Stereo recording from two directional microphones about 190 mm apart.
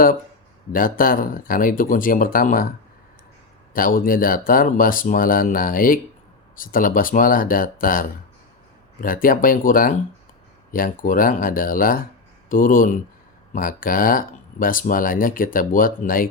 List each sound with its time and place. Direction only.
0.7 s speech: 50° left (ahead or behind)